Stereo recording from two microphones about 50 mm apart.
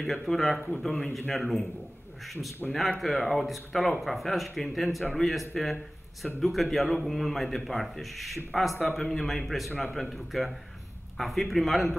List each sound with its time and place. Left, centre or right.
0.0 s speech: centre